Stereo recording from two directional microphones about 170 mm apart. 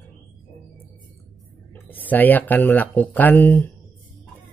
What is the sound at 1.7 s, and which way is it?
Speech, 10° left (ahead or behind).